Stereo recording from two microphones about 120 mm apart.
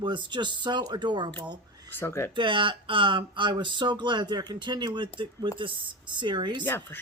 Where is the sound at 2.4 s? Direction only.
45° right (ahead or behind).